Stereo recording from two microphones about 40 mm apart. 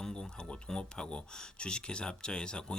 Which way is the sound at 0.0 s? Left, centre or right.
Centre.